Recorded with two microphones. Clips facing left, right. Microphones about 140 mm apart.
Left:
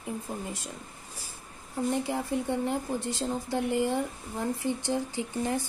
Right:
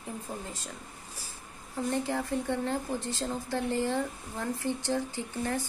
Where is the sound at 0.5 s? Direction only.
15° left (ahead or behind).